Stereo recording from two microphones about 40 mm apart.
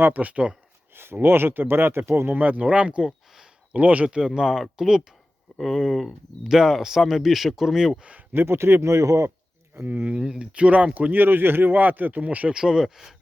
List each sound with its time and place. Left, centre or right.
0.0 s speech: right
0.9 s speech: right
2.6 s speech: right
4.4 s speech: centre
5.5 s speech: centre
6.5 s speech: centre
8.3 s speech: right
9.8 s speech: right
10.9 s speech: right
12.5 s speech: centre